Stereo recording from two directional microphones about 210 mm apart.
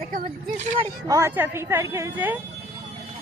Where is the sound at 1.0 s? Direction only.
15° right (ahead or behind).